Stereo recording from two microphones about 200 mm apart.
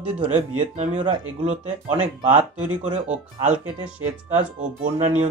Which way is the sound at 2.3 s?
35° right (ahead or behind).